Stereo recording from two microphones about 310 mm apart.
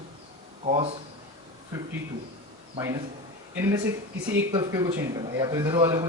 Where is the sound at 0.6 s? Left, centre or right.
Right.